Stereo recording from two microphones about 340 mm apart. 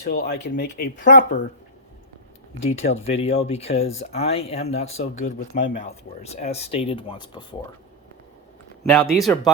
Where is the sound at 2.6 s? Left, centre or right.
Centre.